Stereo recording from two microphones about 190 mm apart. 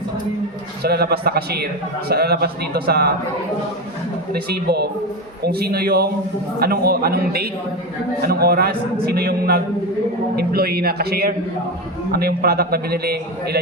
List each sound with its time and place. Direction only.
0.8 s a man's voice: 55° right (ahead or behind)
4.3 s a man's voice: 55° right (ahead or behind)